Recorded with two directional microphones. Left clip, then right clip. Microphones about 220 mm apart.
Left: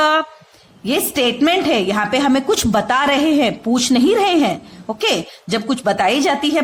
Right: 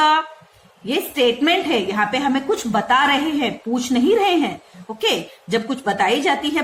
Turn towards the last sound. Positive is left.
turn(degrees=45)  # may be behind; listen again after turning